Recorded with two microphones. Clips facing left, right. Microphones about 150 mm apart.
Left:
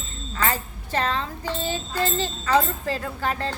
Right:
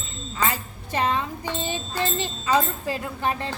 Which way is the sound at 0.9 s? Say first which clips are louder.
Right 1 dB; 15° right (ahead or behind).